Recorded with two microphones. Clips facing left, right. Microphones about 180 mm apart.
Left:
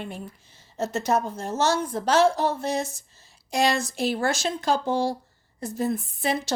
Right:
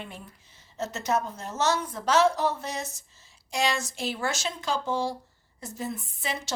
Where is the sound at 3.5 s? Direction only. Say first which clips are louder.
Left 5 dB; 60° left (ahead or behind).